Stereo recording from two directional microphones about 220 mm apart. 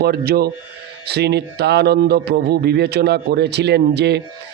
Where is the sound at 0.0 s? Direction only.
45° right (ahead or behind).